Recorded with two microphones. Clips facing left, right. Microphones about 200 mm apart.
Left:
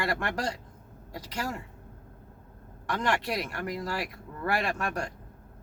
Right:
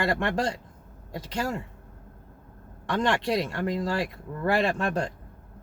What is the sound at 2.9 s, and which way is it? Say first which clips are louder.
Speech: right 4 dB; 25° right (ahead or behind).